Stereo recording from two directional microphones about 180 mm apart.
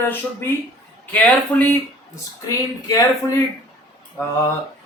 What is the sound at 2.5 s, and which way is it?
Speech, 20° left (ahead or behind).